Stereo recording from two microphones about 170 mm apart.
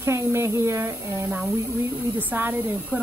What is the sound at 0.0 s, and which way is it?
Speech, 15° right (ahead or behind).